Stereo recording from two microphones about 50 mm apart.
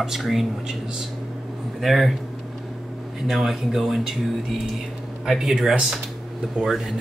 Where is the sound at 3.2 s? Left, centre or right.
Centre.